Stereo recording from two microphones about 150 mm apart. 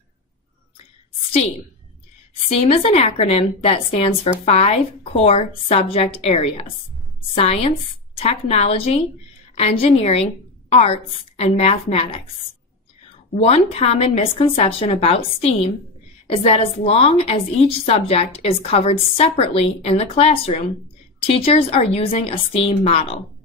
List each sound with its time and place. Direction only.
2.6 s a woman's voice: 40° left (ahead or behind)
13.3 s a woman's voice: 40° left (ahead or behind)